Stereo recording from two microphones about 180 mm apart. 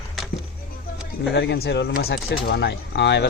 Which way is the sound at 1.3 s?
80° left.